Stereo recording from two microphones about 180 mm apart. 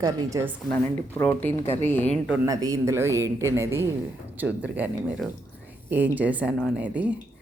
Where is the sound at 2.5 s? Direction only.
20° right (ahead or behind).